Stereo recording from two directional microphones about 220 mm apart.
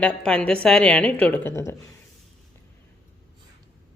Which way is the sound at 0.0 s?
5° left (ahead or behind).